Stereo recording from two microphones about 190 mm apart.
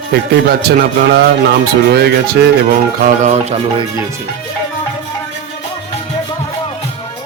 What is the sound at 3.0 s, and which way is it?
Music, 35° right (ahead or behind).